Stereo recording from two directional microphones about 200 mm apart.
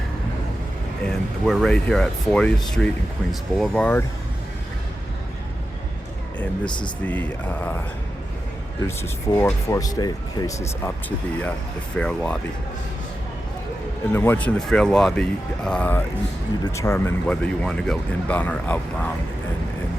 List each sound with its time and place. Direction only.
1.0 s speech: centre (ahead or behind)
6.7 s speech: 25° left (ahead or behind)
7.0 s speech: 10° left (ahead or behind)
9.0 s speech: 10° left (ahead or behind)
11.9 s speech: 5° left (ahead or behind)
14.1 s speech: 10° left (ahead or behind)